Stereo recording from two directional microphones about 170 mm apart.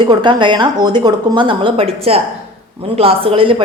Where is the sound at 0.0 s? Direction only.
25° right (ahead or behind).